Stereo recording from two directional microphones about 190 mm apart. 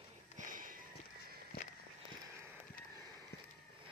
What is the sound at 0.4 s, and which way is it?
Sniff, 45° right (ahead or behind).